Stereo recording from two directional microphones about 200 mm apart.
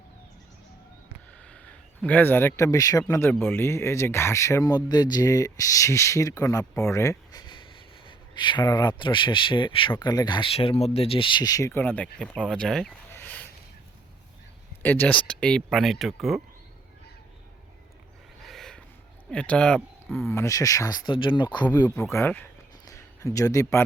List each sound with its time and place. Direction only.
1.3 s a sound: 5° left (ahead or behind)
3.1 s speech: 10° left (ahead or behind)
14.8 s speech: 10° left (ahead or behind)
18.4 s a sound: centre (ahead or behind)
19.3 s speech: 5° left (ahead or behind)
20.3 s speech: 15° left (ahead or behind)
22.1 s speech: 10° left (ahead or behind)